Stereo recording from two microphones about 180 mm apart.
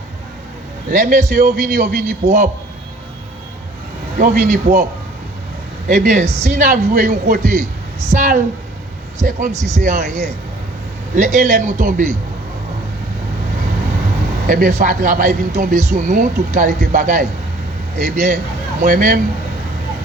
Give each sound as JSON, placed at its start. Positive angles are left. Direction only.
{"t": 0.9, "sound": "speech", "side_deg": -50}
{"t": 4.2, "sound": "speech", "side_deg": -50}
{"t": 5.9, "sound": "speech", "side_deg": -45}
{"t": 11.1, "sound": "speech", "side_deg": -45}
{"t": 14.4, "sound": "speech", "side_deg": -50}